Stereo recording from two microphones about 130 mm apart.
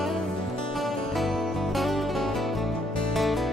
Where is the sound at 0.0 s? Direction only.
Centre (ahead or behind).